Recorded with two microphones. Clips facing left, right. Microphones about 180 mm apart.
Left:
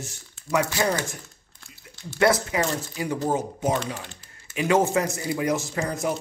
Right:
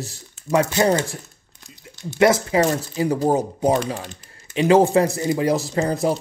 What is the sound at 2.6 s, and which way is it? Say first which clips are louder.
Speech: right 7 dB; 35° right (ahead or behind).